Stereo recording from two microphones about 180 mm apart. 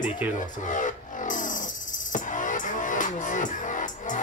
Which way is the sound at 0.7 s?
45° left (ahead or behind).